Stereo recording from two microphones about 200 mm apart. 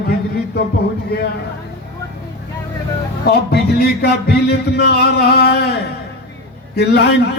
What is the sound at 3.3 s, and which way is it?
A man's voice, 55° left (ahead or behind).